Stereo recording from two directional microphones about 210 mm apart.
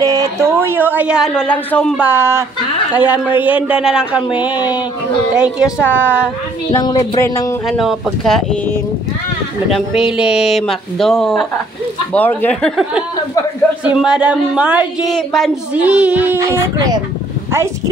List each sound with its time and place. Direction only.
0.0 s a woman's voice: 15° right (ahead or behind); by 2.0 s 5° left (ahead or behind)
2.0 s a woman's voice: 10° right (ahead or behind)
5.3 s a woman's voice: 5° right (ahead or behind)
6.7 s speech: 20° left (ahead or behind)
7.6 s a woman's voice: centre (ahead or behind)
9.7 s a woman's voice: centre (ahead or behind)